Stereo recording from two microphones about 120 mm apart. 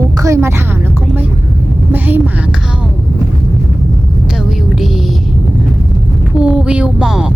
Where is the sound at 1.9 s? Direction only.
15° right (ahead or behind).